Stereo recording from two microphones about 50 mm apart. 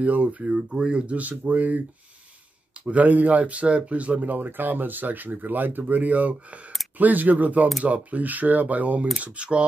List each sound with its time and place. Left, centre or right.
0.0 s speech: right
2.8 s speech: right